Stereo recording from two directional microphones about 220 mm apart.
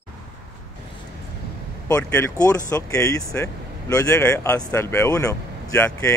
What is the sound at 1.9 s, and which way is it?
Speech, 15° left (ahead or behind).